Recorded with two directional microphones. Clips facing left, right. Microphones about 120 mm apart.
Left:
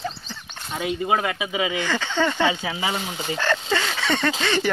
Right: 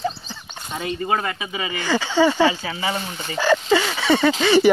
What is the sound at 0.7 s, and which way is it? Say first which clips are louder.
Speech: even; 5° left (ahead or behind).